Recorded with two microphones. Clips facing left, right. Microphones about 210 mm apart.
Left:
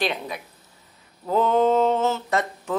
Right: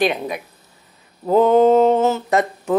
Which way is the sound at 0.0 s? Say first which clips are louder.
Right 7 dB; 15° right (ahead or behind).